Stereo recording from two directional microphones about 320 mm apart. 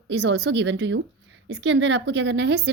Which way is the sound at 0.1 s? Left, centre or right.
Right.